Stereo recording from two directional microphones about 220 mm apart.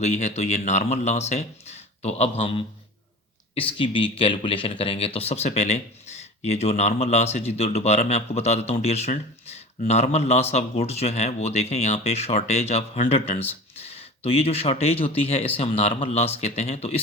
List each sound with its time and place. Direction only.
0.0 s speech: 30° left (ahead or behind)